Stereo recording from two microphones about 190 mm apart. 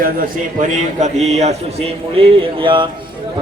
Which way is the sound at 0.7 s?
40° right (ahead or behind).